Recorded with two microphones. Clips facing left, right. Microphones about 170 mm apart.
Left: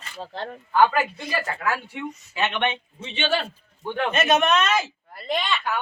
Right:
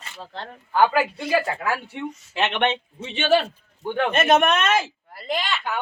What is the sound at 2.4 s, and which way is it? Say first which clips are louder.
Speech: right 2 dB; 70° right (ahead or behind).